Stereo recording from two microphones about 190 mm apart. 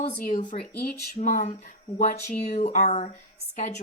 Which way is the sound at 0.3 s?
40° left (ahead or behind).